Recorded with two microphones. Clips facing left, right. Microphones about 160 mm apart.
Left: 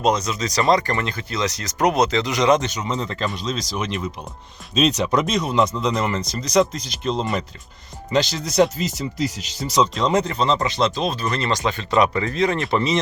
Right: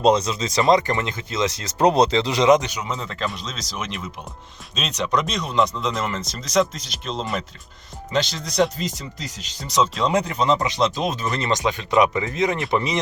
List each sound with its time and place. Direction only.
0.0 s speech: 30° right (ahead or behind)
2.5 s speech: 10° right (ahead or behind)